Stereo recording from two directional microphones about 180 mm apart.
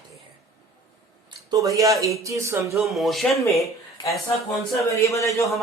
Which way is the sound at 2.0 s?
15° right (ahead or behind).